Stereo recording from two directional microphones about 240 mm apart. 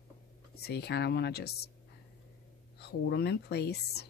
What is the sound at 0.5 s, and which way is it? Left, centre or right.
Speech, left.